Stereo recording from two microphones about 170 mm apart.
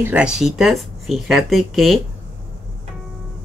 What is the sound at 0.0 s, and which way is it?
Speech, 5° right (ahead or behind).